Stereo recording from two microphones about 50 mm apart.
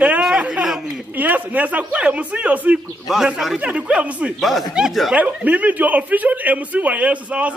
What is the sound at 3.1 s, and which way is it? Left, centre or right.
Speech, centre.